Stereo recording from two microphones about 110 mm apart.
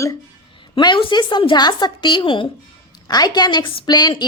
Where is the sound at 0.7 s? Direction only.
45° left (ahead or behind).